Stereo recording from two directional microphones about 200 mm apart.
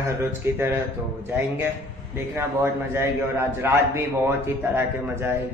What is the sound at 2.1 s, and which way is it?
A man's voice, 10° right (ahead or behind).